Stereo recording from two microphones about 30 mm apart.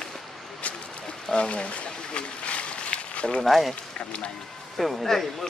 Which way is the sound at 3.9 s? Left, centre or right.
Left.